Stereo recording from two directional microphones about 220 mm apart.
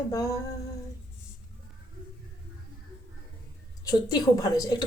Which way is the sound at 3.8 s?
15° left (ahead or behind).